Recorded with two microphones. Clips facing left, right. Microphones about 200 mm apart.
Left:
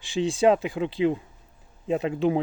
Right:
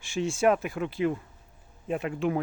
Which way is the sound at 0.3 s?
20° left (ahead or behind).